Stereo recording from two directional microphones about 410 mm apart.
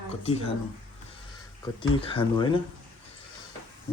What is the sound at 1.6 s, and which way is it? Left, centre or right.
Speech, centre.